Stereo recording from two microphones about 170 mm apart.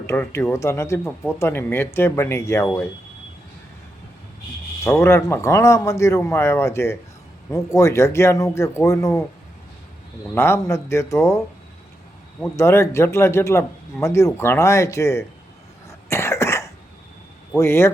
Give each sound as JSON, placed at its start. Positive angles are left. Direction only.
{"t": 0.0, "sound": "speech", "side_deg": 15}
{"t": 4.8, "sound": "speech", "side_deg": 15}
{"t": 10.3, "sound": "speech", "side_deg": 15}
{"t": 12.5, "sound": "speech", "side_deg": 15}
{"t": 15.9, "sound": "cough", "side_deg": 15}
{"t": 17.6, "sound": "speech", "side_deg": 15}